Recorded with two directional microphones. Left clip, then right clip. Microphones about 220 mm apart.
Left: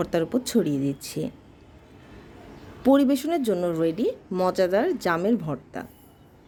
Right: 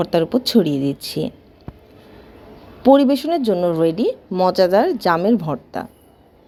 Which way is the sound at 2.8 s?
Centre (ahead or behind).